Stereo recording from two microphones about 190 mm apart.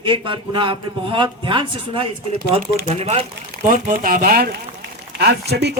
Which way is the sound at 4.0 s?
45° right (ahead or behind).